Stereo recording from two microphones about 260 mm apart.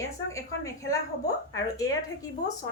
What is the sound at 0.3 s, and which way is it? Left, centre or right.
A woman's voice, centre.